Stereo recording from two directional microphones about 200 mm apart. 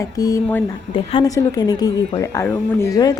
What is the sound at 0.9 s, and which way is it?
A woman's voice, 20° left (ahead or behind).